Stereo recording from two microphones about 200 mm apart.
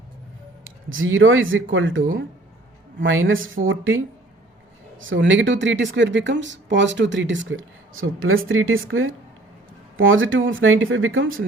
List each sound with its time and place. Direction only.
0.6 s a woman's voice: 80° right
4.9 s speech: 70° right (ahead or behind); by 9.1 s 85° right
10.0 s speech: 75° right (ahead or behind)